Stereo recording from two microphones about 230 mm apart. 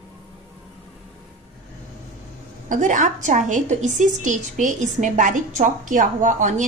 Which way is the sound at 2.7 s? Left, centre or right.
Right.